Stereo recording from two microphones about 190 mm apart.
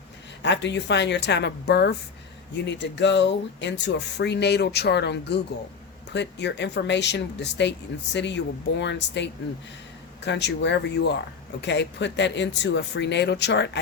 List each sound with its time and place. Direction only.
0.4 s speech: 65° left (ahead or behind)